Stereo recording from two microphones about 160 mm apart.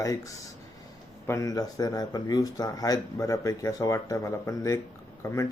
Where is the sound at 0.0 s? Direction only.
20° left (ahead or behind).